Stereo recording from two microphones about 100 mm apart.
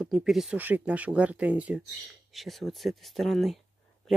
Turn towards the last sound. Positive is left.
turn(degrees=0)  # may be behind; listen again after turning